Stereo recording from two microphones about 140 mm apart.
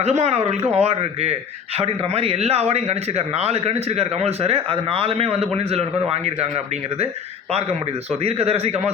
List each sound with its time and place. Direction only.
0.0 s a man's voice: 50° right (ahead or behind)
8.2 s a man's voice: 45° right (ahead or behind)